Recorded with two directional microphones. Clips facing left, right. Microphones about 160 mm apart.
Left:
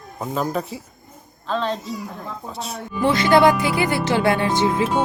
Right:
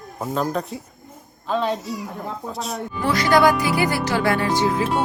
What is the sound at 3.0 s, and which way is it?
Speech, 25° left (ahead or behind).